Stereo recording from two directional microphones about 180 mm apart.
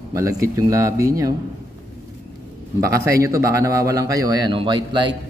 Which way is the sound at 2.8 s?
15° right (ahead or behind).